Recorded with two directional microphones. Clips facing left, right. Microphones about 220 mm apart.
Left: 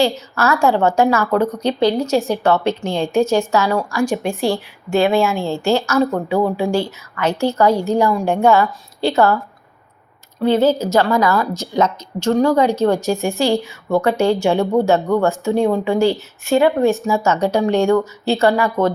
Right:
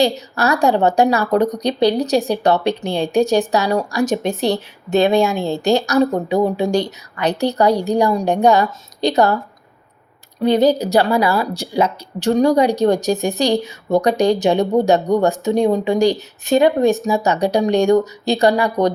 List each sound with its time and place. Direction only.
0.3 s a woman's voice: 15° right (ahead or behind)
10.4 s a woman's voice: 15° right (ahead or behind)